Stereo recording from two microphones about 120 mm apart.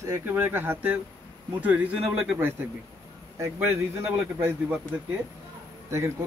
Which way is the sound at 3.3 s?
15° right (ahead or behind).